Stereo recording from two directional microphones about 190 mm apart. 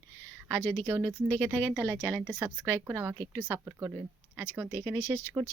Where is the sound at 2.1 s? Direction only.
10° right (ahead or behind).